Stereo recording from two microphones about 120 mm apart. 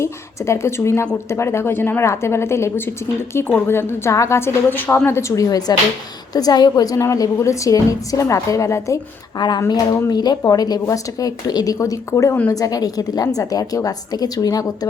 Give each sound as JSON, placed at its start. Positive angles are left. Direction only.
{"t": 0.0, "sound": "a woman's voice", "side_deg": 25}